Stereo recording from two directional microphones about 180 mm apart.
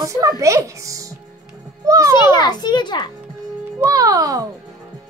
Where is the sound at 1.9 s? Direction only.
15° right (ahead or behind).